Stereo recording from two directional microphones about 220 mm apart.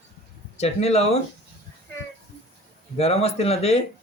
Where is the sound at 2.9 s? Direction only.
30° left (ahead or behind).